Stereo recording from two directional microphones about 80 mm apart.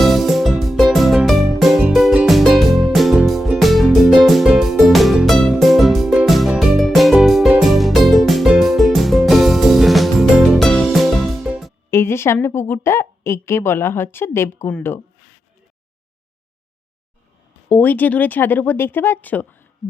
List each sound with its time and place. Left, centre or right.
0.0 s music: centre
10.7 s music: centre
11.2 s music: centre
11.9 s a woman's voice: left
17.7 s speech: left